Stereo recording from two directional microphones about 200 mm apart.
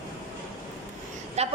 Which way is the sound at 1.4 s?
30° right (ahead or behind).